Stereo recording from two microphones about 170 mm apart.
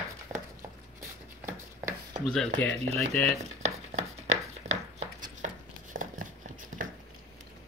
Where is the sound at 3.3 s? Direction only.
40° right (ahead or behind).